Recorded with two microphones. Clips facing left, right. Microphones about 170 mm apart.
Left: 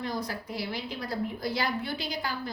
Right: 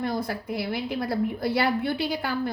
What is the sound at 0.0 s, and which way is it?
A woman's voice, 50° right (ahead or behind).